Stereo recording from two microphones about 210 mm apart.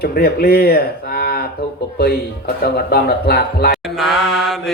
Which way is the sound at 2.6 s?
45° left (ahead or behind).